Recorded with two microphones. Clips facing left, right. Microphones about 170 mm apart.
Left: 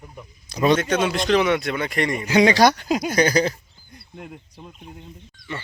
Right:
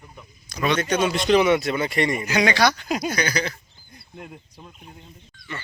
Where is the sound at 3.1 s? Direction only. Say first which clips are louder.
Left 7 dB; 45° left (ahead or behind).